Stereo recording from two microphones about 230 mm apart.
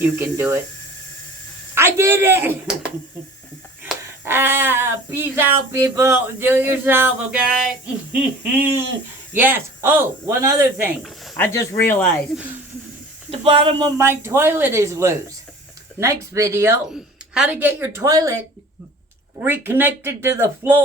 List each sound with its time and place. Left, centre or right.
0.3 s speech: centre
1.7 s speech: centre
3.8 s speech: centre
11.0 s speech: centre
13.3 s speech: right
19.4 s speech: centre